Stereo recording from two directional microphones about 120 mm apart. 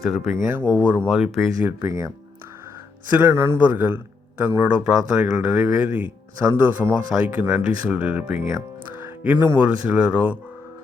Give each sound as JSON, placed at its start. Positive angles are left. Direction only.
{"t": 0.0, "sound": "speech", "side_deg": 0}
{"t": 0.7, "sound": "a man's voice", "side_deg": -15}
{"t": 1.1, "sound": "speech", "side_deg": -5}
{"t": 1.8, "sound": "speech", "side_deg": -25}
{"t": 3.1, "sound": "a man's voice", "side_deg": -15}